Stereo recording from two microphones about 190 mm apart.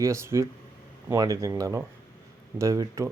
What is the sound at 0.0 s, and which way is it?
Speech, 15° right (ahead or behind).